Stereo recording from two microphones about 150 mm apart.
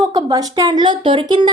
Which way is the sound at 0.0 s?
25° right (ahead or behind).